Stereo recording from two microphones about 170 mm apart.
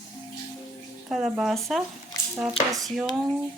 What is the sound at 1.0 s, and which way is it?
Speech, 5° right (ahead or behind).